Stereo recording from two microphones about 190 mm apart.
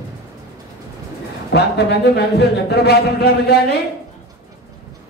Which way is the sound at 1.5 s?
60° left (ahead or behind).